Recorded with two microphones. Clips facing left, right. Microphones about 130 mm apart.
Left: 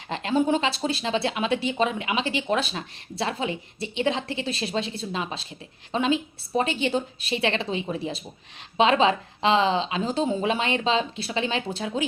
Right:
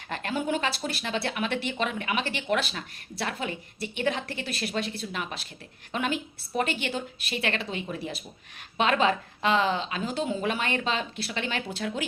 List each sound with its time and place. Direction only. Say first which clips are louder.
0.1 s speech: left 6 dB; 20° left (ahead or behind)